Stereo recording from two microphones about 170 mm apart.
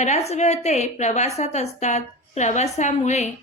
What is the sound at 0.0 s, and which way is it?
A woman's voice, 40° left (ahead or behind).